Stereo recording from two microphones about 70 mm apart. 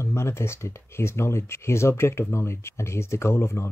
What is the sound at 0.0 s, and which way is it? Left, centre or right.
Speech, left.